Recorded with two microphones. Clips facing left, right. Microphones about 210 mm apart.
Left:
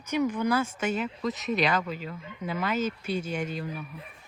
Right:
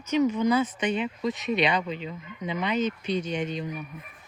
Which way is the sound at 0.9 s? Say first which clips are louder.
Right 2 dB; centre (ahead or behind).